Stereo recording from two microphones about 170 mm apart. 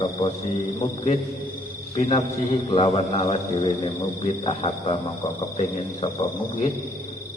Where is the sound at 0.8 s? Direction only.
40° left (ahead or behind).